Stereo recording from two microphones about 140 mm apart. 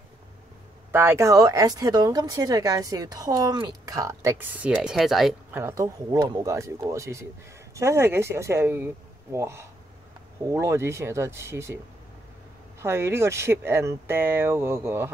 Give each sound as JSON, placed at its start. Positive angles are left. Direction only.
{"t": 0.9, "sound": "speech", "side_deg": -20}
{"t": 5.5, "sound": "speech", "side_deg": -15}
{"t": 12.8, "sound": "speech", "side_deg": -20}